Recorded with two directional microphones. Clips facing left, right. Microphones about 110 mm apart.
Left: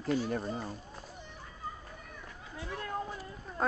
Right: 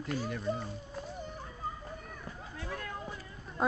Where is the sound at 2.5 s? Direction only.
25° left (ahead or behind).